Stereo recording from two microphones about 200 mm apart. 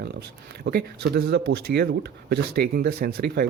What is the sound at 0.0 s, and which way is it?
Speech, 55° right (ahead or behind).